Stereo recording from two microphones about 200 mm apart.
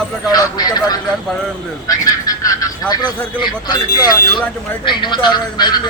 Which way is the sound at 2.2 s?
20° left (ahead or behind).